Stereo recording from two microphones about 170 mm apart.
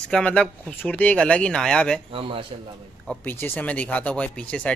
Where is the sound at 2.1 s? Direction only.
30° right (ahead or behind).